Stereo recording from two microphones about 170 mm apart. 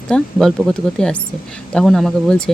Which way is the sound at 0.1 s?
Centre (ahead or behind).